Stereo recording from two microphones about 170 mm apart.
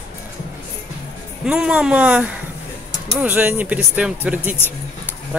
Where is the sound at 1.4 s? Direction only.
5° right (ahead or behind).